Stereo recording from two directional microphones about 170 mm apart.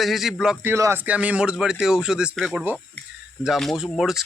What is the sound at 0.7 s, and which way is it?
Speech, 15° right (ahead or behind).